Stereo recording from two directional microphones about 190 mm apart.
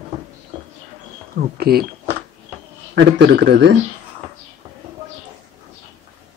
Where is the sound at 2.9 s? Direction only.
70° right (ahead or behind).